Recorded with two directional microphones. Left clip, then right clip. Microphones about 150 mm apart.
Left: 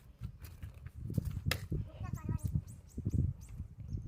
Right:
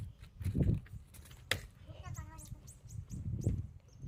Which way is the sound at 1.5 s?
Centre (ahead or behind).